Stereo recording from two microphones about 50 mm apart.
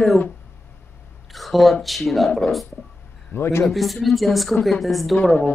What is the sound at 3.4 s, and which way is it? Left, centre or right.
Speech, left.